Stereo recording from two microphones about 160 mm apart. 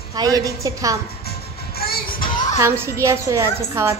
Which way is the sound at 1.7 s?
70° left (ahead or behind).